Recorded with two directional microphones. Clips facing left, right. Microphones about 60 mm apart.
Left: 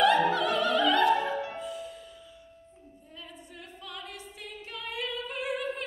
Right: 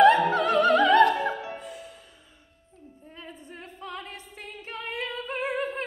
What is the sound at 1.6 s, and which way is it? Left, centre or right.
Music, right.